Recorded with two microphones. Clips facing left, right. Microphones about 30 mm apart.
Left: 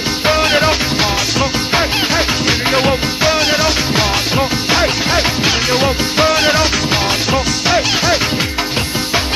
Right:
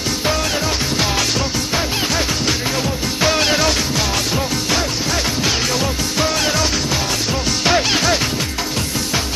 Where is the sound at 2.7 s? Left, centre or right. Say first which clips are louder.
Left 8 dB; left.